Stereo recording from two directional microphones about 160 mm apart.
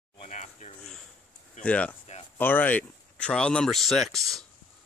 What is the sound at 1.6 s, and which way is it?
Speech, 10° left (ahead or behind).